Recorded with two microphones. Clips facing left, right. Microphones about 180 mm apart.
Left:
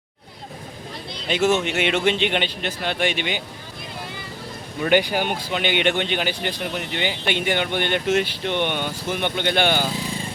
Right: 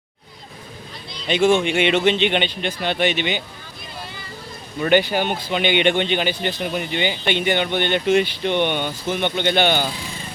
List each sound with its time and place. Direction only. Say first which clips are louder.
1.3 s speech: right 3 dB; 5° left (ahead or behind)
4.8 s speech: right 2 dB; 10° left (ahead or behind)